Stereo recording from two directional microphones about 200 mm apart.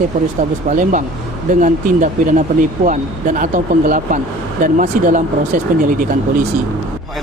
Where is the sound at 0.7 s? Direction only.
40° right (ahead or behind).